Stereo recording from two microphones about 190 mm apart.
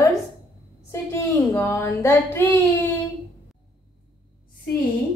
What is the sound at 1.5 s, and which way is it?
A woman's voice, 15° left (ahead or behind).